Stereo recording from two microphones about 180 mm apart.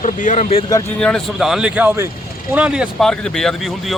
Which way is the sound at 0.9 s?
5° left (ahead or behind).